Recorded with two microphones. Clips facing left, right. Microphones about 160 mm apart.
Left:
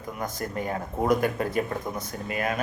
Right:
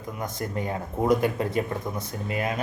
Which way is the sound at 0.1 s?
25° right (ahead or behind).